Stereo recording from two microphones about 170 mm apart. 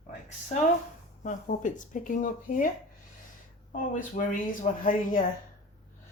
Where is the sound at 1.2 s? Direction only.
50° left (ahead or behind).